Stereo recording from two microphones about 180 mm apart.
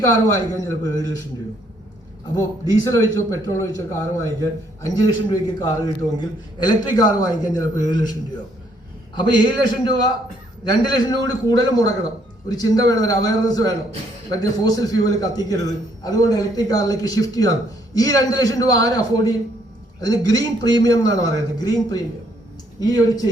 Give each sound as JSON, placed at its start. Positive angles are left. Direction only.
{"t": 0.0, "sound": "a man's voice", "side_deg": 20}
{"t": 2.8, "sound": "a man's voice", "side_deg": 20}
{"t": 9.1, "sound": "a man's voice", "side_deg": 25}